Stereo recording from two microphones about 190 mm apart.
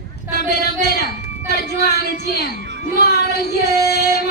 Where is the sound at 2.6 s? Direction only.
65° right (ahead or behind).